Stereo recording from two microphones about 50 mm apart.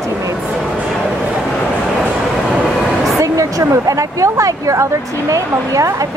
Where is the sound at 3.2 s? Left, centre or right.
Right.